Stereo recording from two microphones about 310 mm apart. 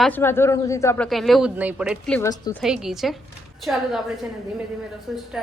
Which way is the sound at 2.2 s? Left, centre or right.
Centre.